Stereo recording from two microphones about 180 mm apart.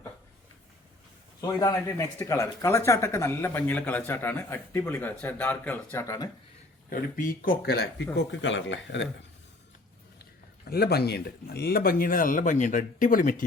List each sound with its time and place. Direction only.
1.4 s speech: 20° left (ahead or behind)
7.2 s speech: 55° left (ahead or behind)
8.1 s speech: 85° left
10.7 s speech: 60° left (ahead or behind)